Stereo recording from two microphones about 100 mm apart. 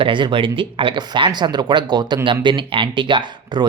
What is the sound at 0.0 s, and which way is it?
Speech, 55° right (ahead or behind).